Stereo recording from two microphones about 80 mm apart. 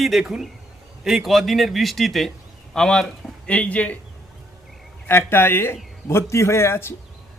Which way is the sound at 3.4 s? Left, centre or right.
Centre.